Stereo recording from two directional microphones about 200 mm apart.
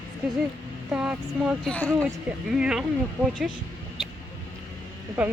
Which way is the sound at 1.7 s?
5° left (ahead or behind).